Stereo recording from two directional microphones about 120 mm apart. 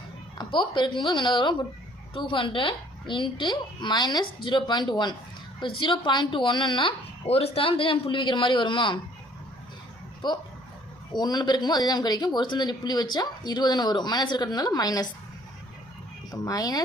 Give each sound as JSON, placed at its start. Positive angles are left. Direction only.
{"t": 0.3, "sound": "speech", "side_deg": 40}
{"t": 7.3, "sound": "a man's voice", "side_deg": 55}
{"t": 11.1, "sound": "speech", "side_deg": 35}
{"t": 16.3, "sound": "speech", "side_deg": 30}